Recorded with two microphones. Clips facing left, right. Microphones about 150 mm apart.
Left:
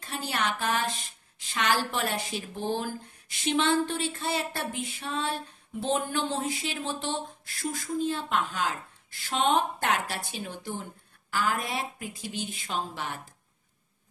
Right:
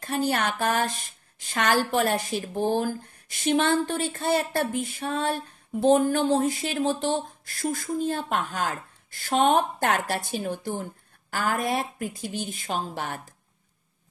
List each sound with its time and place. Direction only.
0.0 s speech: 45° right (ahead or behind)